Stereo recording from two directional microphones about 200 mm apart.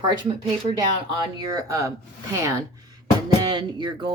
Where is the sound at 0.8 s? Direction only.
20° right (ahead or behind).